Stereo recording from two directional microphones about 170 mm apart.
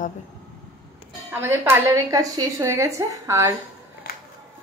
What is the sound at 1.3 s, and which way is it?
A woman's voice, 10° right (ahead or behind).